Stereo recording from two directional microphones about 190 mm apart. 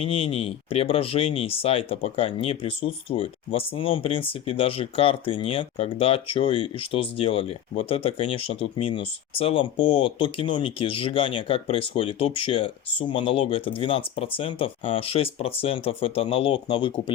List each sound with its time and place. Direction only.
0.0 s speech: 30° left (ahead or behind)